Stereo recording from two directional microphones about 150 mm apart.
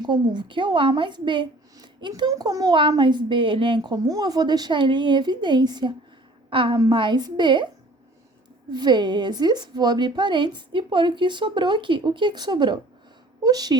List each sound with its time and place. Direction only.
0.0 s a woman's voice: 30° right (ahead or behind)
8.7 s a woman's voice: 30° right (ahead or behind)